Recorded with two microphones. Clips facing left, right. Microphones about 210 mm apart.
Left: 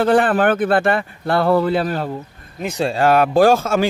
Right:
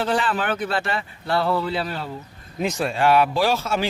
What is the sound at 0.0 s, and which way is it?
Speech, 55° left (ahead or behind).